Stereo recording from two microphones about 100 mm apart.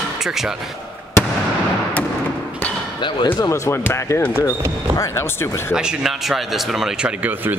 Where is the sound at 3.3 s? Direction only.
40° left (ahead or behind).